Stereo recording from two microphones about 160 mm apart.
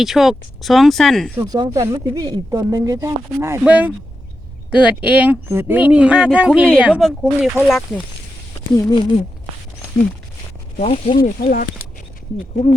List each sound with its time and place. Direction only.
0.0 s speech: centre (ahead or behind)
1.4 s speech: 25° right (ahead or behind); by 7.5 s 5° right (ahead or behind)
8.7 s speech: 25° left (ahead or behind)
10.8 s speech: 40° left (ahead or behind)
11.2 s speech: 60° left (ahead or behind)